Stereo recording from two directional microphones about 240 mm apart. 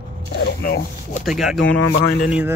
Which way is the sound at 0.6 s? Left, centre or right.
Left.